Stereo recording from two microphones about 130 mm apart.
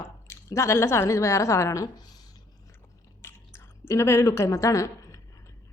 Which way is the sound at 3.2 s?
20° left (ahead or behind).